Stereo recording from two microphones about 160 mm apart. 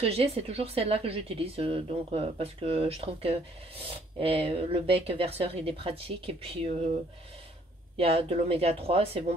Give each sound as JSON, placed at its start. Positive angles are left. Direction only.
{"t": 0.0, "sound": "speech", "side_deg": -40}
{"t": 8.0, "sound": "speech", "side_deg": -35}